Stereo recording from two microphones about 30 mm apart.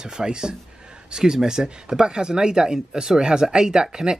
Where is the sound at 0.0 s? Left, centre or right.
Right.